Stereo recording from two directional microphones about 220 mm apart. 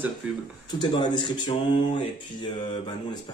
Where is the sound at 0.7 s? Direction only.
20° left (ahead or behind).